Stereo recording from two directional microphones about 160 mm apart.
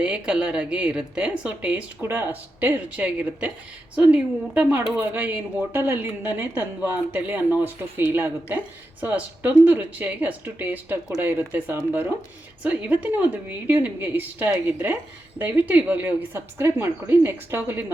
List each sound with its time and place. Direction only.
0.0 s speech: 5° right (ahead or behind)